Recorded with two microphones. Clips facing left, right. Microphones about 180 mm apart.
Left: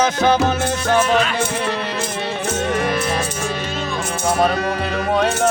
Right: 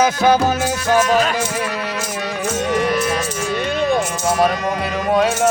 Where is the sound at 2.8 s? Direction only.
30° left (ahead or behind).